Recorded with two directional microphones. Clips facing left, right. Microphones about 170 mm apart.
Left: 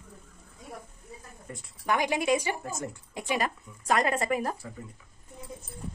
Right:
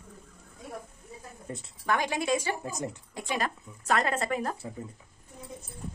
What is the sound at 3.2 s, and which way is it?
Speech, 15° left (ahead or behind).